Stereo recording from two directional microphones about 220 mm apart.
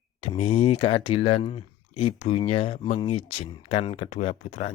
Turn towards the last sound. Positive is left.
turn(degrees=30)  # may be behind; listen again after turning